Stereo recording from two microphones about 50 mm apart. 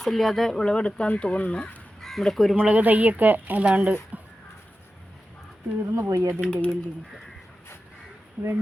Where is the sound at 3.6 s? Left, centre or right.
Right.